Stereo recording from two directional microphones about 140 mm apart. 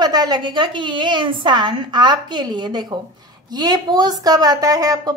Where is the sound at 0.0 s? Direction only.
30° right (ahead or behind).